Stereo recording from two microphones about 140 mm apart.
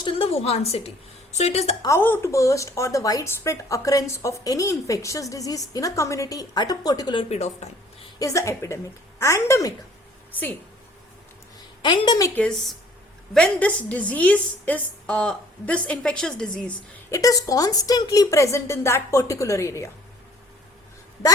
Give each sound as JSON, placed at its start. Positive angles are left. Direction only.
{"t": 0.0, "sound": "a woman's voice", "side_deg": 40}
{"t": 1.8, "sound": "a woman's voice", "side_deg": 20}
{"t": 7.2, "sound": "a woman's voice", "side_deg": 50}
{"t": 8.2, "sound": "a woman's voice", "side_deg": 20}
{"t": 11.8, "sound": "a woman's voice", "side_deg": 35}
{"t": 12.3, "sound": "a woman's voice", "side_deg": 5}
{"t": 17.1, "sound": "a woman's voice", "side_deg": 25}